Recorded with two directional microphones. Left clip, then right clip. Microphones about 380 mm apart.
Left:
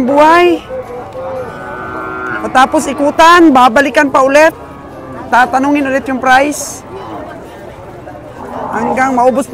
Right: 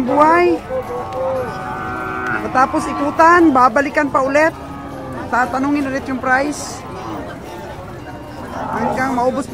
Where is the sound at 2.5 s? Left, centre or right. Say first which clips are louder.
Left 7 dB; centre.